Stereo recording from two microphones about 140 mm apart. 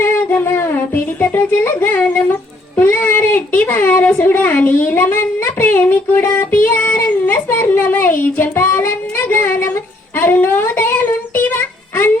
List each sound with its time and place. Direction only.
0.0 s music: 15° left (ahead or behind)
2.7 s a sound: 15° left (ahead or behind)
10.2 s child singing: 15° left (ahead or behind)